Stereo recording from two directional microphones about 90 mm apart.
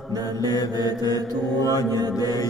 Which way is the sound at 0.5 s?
45° left (ahead or behind).